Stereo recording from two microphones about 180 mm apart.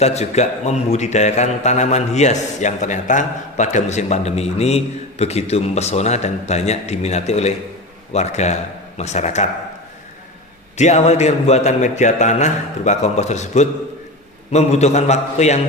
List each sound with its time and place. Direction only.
0.0 s a man's voice: 35° left (ahead or behind)
10.8 s a man's voice: 40° left (ahead or behind)